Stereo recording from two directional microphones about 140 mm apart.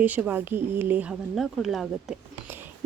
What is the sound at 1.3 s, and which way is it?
Speech, centre (ahead or behind).